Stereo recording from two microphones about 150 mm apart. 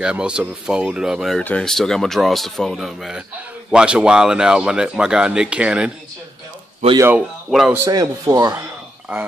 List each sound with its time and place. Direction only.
0.0 s speech: 5° right (ahead or behind)
7.0 s speech: 15° right (ahead or behind)
7.5 s speech: centre (ahead or behind)
7.8 s a man's voice: 25° right (ahead or behind)